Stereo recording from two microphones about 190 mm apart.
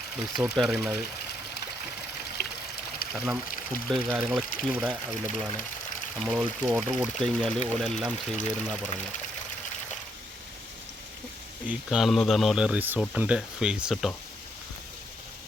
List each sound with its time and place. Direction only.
0.4 s speech: 5° right (ahead or behind)
2.4 s stream: 55° left (ahead or behind)
3.0 s pour: 50° left (ahead or behind)
3.8 s speech: 5° right (ahead or behind)
11.6 s speech: 5° right (ahead or behind)